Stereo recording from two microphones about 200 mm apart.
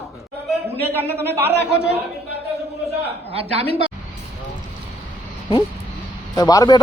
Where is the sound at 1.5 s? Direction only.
55° right (ahead or behind).